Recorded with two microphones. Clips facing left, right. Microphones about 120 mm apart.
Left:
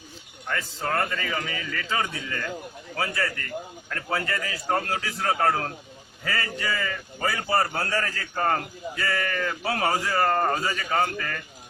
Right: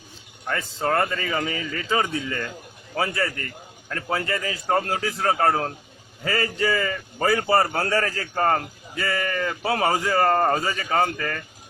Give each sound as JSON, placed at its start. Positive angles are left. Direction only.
{"t": 0.4, "sound": "a man's voice", "side_deg": -35}
{"t": 7.5, "sound": "a man's voice", "side_deg": -50}
{"t": 9.0, "sound": "a man's voice", "side_deg": -25}